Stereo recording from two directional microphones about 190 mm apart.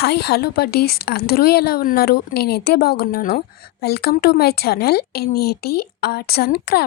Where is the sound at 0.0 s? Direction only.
60° left (ahead or behind).